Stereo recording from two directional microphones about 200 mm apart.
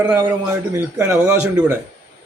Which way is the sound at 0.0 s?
10° right (ahead or behind).